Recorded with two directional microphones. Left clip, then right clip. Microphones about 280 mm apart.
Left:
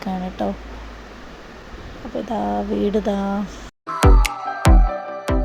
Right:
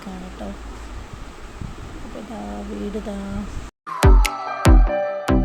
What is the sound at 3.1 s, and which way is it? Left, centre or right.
Speech, left.